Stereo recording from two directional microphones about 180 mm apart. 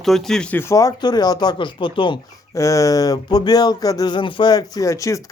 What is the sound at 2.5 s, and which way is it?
Speech, 15° left (ahead or behind).